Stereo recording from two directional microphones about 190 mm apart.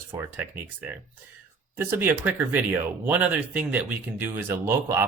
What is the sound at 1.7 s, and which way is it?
Speech, 10° right (ahead or behind).